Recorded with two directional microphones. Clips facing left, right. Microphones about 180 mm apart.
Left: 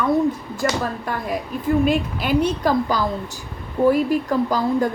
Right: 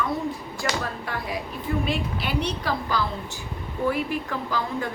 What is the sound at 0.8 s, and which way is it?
A woman's voice, 45° left (ahead or behind).